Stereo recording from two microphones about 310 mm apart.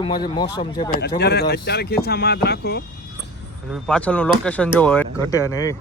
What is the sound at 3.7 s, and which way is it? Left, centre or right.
Speech, centre.